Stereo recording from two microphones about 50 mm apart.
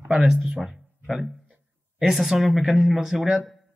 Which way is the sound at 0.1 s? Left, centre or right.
Centre.